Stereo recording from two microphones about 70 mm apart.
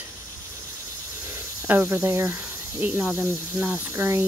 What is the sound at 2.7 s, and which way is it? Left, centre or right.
Speech, right.